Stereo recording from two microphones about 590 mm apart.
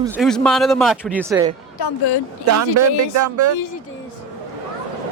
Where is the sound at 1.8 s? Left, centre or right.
Left.